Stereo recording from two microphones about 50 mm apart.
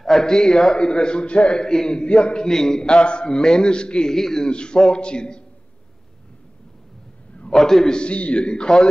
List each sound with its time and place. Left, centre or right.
0.0 s a man's voice: centre
7.5 s a man's voice: centre
8.0 s a man's voice: left